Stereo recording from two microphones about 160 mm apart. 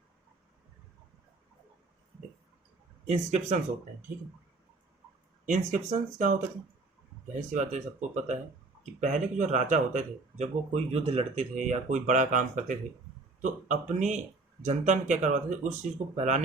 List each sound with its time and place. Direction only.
3.1 s speech: 45° right (ahead or behind)
5.5 s speech: 50° right (ahead or behind)
7.3 s speech: 45° right (ahead or behind)